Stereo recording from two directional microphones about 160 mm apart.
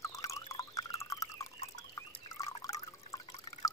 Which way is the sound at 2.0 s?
20° left (ahead or behind).